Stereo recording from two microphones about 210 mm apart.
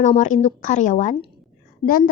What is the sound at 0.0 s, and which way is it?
A woman's voice, 35° left (ahead or behind).